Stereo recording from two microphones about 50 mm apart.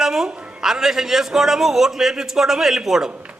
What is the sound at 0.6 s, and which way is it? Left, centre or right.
A man's voice, centre.